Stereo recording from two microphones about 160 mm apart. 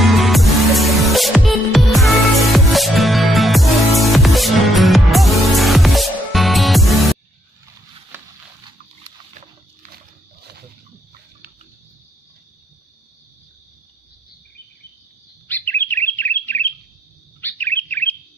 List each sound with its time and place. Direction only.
0.0 s music: centre (ahead or behind)
15.4 s bird: 10° left (ahead or behind)